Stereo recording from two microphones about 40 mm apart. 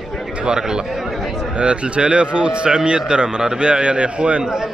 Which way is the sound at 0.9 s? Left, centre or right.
Centre.